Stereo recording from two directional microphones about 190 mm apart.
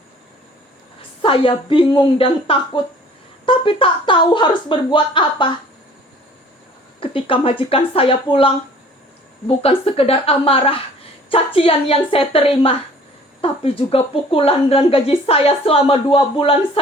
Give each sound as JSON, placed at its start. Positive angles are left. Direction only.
{"t": 1.2, "sound": "speech", "side_deg": 25}
{"t": 7.0, "sound": "a woman's voice", "side_deg": 30}